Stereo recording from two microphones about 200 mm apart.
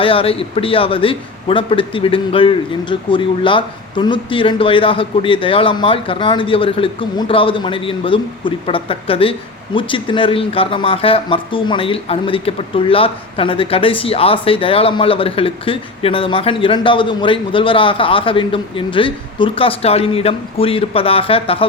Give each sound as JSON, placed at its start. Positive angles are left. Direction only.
{"t": 0.0, "sound": "speech", "side_deg": 25}